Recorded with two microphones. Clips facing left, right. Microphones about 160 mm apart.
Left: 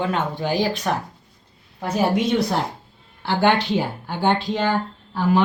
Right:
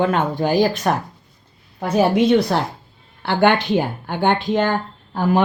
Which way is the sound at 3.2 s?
60° right (ahead or behind).